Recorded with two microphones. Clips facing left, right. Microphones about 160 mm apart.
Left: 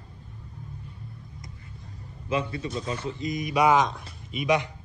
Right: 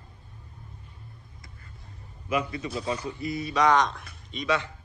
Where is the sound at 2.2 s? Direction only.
30° left (ahead or behind); by 4.7 s 10° left (ahead or behind).